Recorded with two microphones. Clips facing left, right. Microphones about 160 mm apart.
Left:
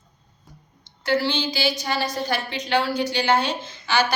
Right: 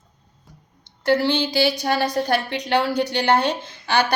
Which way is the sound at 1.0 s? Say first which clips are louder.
Right 4 dB; 60° right (ahead or behind).